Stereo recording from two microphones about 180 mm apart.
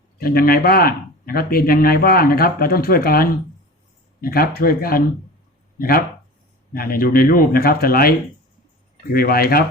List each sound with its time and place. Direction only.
0.2 s speech: 55° left (ahead or behind)
6.7 s speech: 55° left (ahead or behind)
9.1 s speech: 55° left (ahead or behind)